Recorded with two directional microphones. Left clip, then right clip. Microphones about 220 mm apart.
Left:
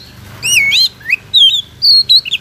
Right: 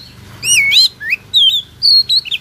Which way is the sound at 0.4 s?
20° right (ahead or behind).